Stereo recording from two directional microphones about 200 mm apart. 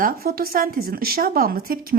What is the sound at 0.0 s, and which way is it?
A woman's voice, 50° right (ahead or behind).